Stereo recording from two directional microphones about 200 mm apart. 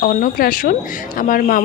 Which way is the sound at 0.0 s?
45° left (ahead or behind).